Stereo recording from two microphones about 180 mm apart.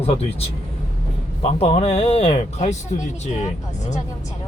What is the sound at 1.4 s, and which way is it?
Speech, 35° left (ahead or behind).